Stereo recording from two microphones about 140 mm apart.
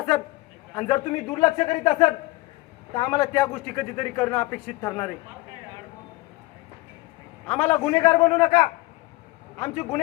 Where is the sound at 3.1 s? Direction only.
15° left (ahead or behind).